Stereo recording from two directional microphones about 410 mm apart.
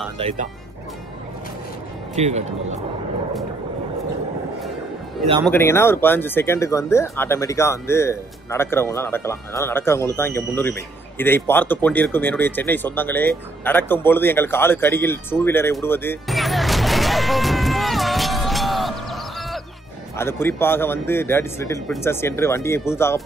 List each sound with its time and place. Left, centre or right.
2.1 s speech: centre
5.4 s speech: centre
13.7 s a sound: centre
20.2 s speech: centre